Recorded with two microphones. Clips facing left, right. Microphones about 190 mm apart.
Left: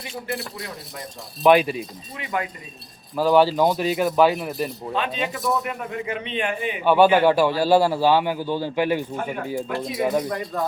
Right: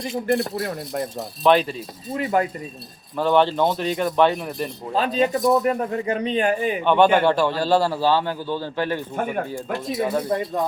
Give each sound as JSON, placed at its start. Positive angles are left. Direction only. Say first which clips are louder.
{"t": 0.0, "sound": "speech", "louder": "right 8 dB", "side_deg": -45}
{"t": 1.5, "sound": "a man's voice", "louder": "left 2 dB", "side_deg": 10}
{"t": 2.1, "sound": "a man's voice", "louder": "right 7 dB", "side_deg": -40}
{"t": 3.2, "sound": "a man's voice", "louder": "left 1 dB", "side_deg": 5}
{"t": 4.9, "sound": "a man's voice", "louder": "right 7 dB", "side_deg": -40}
{"t": 6.8, "sound": "a man's voice", "louder": "left 1 dB", "side_deg": 5}
{"t": 10.2, "sound": "speech", "louder": "right 4 dB", "side_deg": -25}